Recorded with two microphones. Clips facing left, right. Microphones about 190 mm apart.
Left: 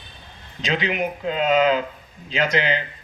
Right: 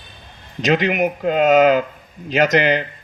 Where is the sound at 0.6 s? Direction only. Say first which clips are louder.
Right 7 dB; 45° right (ahead or behind).